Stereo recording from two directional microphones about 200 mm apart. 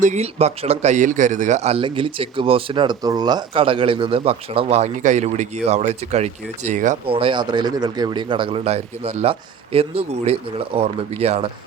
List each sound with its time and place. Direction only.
0.0 s speech: 35° right (ahead or behind)
7.2 s speech: 25° right (ahead or behind)